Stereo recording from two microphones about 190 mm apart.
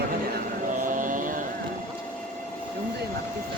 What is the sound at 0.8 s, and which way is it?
Vehicle, 45° right (ahead or behind).